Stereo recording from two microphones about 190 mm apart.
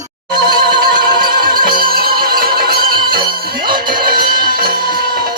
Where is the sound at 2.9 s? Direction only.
25° right (ahead or behind).